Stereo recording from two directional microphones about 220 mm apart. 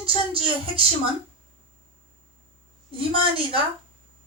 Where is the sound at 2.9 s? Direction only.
25° right (ahead or behind).